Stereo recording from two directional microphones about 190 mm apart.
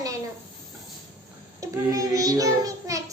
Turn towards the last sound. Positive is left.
turn(degrees=-15)  # may be behind; listen again after turning